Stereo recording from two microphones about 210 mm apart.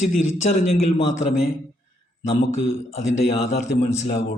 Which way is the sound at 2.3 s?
30° left (ahead or behind).